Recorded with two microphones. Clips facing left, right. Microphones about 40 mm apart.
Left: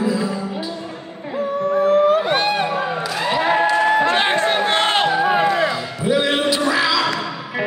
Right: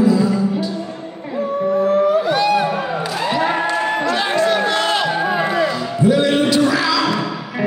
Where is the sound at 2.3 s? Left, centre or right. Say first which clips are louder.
Right 3 dB; left.